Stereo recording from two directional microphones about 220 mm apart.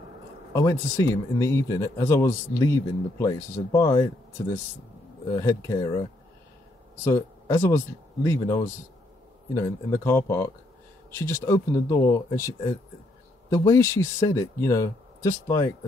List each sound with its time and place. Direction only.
0.5 s speech: 15° left (ahead or behind)
5.3 s speech: 15° left (ahead or behind)
7.1 s speech: 10° left (ahead or behind)